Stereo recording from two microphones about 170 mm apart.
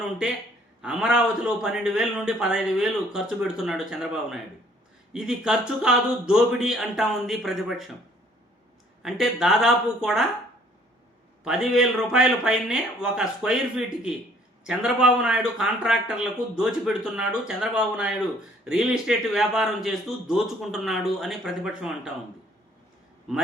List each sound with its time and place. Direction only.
0.8 s a man's voice: 5° right (ahead or behind)
9.0 s a man's voice: centre (ahead or behind)
11.4 s a man's voice: 5° right (ahead or behind)
23.3 s a man's voice: 5° right (ahead or behind)